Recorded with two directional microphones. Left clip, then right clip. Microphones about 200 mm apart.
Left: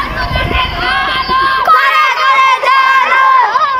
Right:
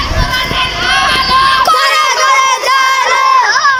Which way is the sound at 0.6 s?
Centre (ahead or behind).